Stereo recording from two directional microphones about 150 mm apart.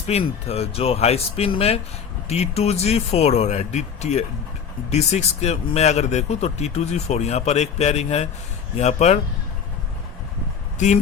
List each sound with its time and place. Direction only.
0.1 s speech: 45° left (ahead or behind)
10.8 s speech: 50° left (ahead or behind)